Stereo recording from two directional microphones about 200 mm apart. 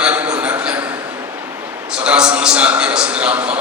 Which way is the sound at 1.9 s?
5° right (ahead or behind).